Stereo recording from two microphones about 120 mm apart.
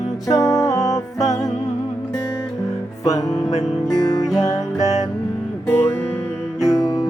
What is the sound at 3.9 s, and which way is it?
Music, 30° left (ahead or behind).